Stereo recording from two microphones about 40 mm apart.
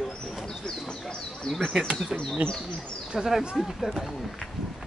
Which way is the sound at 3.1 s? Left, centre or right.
Centre.